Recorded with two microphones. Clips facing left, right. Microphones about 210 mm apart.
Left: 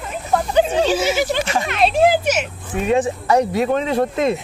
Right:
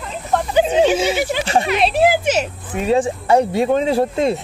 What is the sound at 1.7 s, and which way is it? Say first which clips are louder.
Speech: left 2 dB; centre (ahead or behind).